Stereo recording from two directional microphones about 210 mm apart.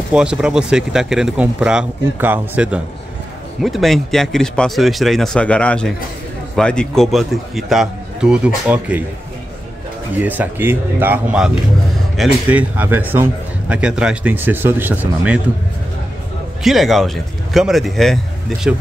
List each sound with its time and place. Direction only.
0.1 s a man's voice: 5° right (ahead or behind)
10.1 s a man's voice: 10° right (ahead or behind)
16.6 s speech: centre (ahead or behind)